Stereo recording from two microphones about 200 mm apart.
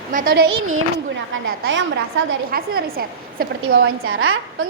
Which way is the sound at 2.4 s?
50° right (ahead or behind).